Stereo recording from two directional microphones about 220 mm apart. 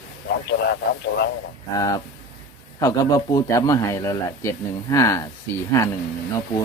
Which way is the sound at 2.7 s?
15° left (ahead or behind).